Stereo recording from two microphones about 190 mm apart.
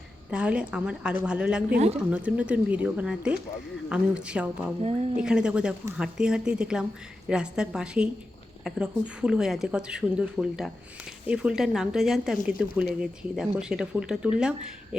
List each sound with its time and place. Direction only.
0.3 s speech: 5° right (ahead or behind)
4.8 s speech: 35° right (ahead or behind)
5.2 s speech: 5° right (ahead or behind)